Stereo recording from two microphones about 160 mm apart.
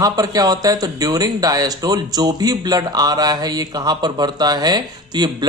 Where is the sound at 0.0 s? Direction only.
25° right (ahead or behind).